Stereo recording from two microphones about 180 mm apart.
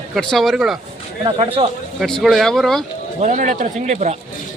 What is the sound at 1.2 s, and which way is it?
Speech, 30° right (ahead or behind).